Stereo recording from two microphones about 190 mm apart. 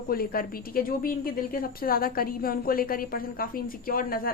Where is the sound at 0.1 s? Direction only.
50° left (ahead or behind).